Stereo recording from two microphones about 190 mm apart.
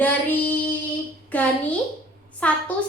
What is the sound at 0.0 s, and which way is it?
Child singing, 10° left (ahead or behind).